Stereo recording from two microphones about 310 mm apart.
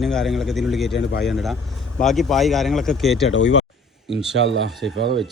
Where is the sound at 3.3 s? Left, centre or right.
Left.